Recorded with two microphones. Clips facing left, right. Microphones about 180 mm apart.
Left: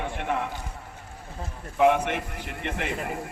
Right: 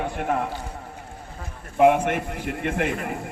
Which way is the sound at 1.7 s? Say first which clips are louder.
Right 4 dB; 50° right (ahead or behind).